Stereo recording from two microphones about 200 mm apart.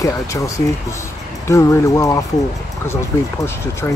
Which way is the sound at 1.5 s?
15° left (ahead or behind).